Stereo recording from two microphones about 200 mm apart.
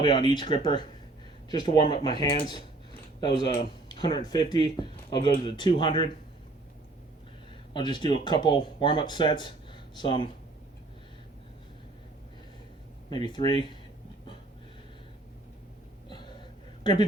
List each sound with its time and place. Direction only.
0.0 s speech: 20° left (ahead or behind)
7.7 s speech: 25° left (ahead or behind)
13.1 s speech: 20° left (ahead or behind)
16.0 s a sound: 20° left (ahead or behind)